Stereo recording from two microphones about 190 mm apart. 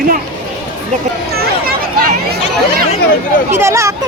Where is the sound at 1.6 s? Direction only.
50° right (ahead or behind).